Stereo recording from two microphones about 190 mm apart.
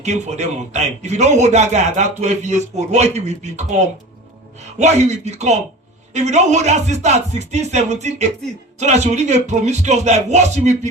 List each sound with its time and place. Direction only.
0.0 s a man's voice: 35° right (ahead or behind)